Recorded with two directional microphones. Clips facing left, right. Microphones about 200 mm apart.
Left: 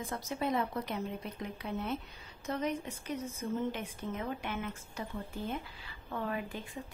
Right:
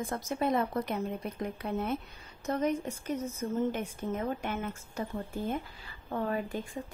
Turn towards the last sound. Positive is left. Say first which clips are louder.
# right 5 dB
turn(degrees=-40)  # may be behind; listen again after turning